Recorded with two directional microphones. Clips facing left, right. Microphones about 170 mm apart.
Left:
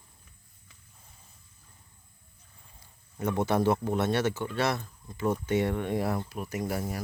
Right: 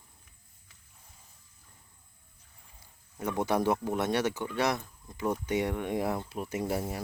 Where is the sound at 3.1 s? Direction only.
10° right (ahead or behind).